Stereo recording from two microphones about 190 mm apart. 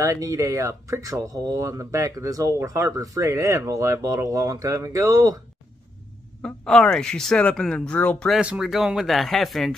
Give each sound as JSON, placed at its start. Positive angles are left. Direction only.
{"t": 0.0, "sound": "speech", "side_deg": -15}
{"t": 6.4, "sound": "speech", "side_deg": 5}
{"t": 8.4, "sound": "speech", "side_deg": -5}